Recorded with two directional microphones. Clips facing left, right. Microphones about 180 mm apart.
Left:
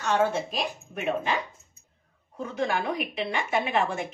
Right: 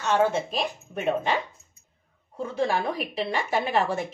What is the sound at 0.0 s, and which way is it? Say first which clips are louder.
Speech: right 2 dB; 25° right (ahead or behind).